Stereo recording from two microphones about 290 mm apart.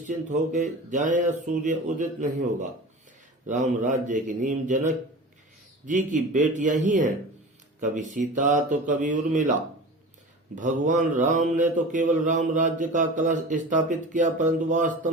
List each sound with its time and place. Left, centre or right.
0.0 s mantra: right